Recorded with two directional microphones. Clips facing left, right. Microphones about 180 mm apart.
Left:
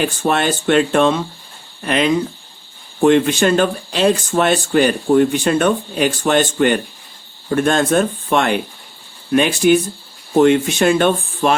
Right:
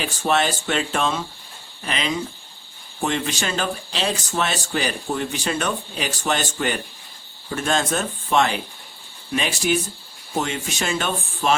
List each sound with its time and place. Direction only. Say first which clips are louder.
0.0 s speech: left 4 dB; 55° left (ahead or behind)